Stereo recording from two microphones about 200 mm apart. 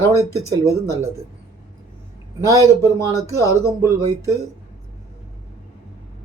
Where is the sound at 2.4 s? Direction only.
15° right (ahead or behind).